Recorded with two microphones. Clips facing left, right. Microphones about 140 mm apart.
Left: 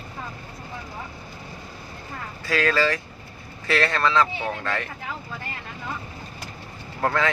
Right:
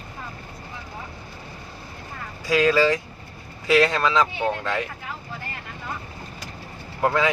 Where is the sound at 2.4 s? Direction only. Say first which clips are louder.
Right 4 dB; 15° right (ahead or behind).